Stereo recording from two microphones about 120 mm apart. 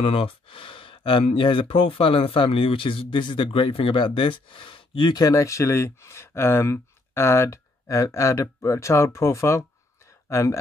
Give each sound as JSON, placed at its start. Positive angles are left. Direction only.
{"t": 0.0, "sound": "speech", "side_deg": 50}